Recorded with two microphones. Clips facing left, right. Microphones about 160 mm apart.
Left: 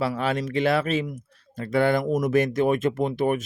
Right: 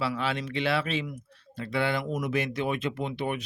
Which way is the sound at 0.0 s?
45° left (ahead or behind).